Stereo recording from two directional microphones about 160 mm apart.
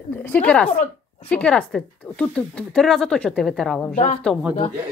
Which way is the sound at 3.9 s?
50° left (ahead or behind).